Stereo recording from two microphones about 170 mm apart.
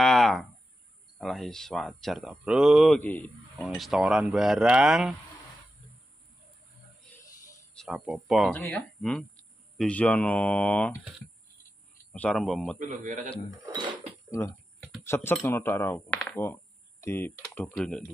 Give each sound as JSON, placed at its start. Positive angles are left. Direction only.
{"t": 0.0, "sound": "a sound", "side_deg": 0}
{"t": 1.1, "sound": "speech", "side_deg": 0}
{"t": 3.0, "sound": "speech", "side_deg": 10}
{"t": 7.7, "sound": "a sound", "side_deg": 0}
{"t": 8.1, "sound": "speech", "side_deg": -5}
{"t": 12.1, "sound": "speech", "side_deg": 5}
{"t": 12.7, "sound": "a man's voice", "side_deg": -45}
{"t": 15.0, "sound": "speech", "side_deg": 15}